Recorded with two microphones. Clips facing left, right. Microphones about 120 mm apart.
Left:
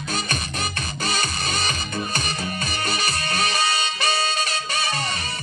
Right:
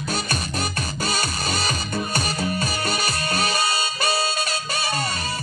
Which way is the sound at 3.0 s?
35° right (ahead or behind).